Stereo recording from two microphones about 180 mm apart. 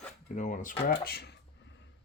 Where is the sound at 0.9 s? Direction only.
65° left (ahead or behind).